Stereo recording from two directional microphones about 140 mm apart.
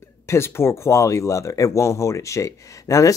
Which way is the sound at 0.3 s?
20° left (ahead or behind).